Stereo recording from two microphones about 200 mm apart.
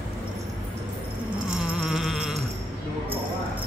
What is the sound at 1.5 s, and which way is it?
Music, 5° right (ahead or behind).